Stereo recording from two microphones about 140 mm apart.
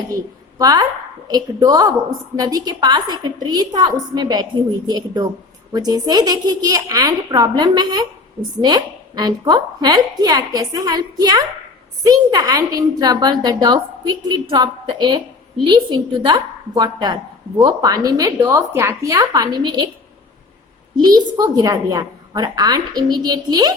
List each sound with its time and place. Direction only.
0.6 s a woman's voice: 25° right (ahead or behind)
16.2 s a woman's voice: 30° right (ahead or behind)
21.0 s a woman's voice: 30° right (ahead or behind)